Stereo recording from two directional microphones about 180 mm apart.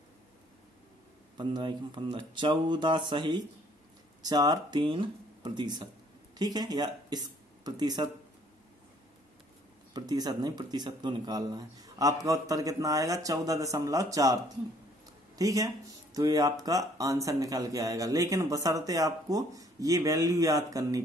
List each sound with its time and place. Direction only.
1.3 s speech: 25° right (ahead or behind)
9.9 s speech: 20° right (ahead or behind)